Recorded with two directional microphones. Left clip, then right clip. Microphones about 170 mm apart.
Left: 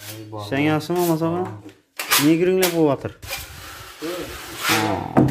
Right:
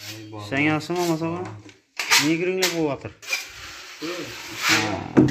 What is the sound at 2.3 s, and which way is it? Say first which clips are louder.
Speech: left 5 dB; 35° left (ahead or behind).